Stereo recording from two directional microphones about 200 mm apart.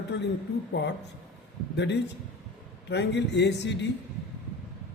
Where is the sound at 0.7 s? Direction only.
60° left (ahead or behind).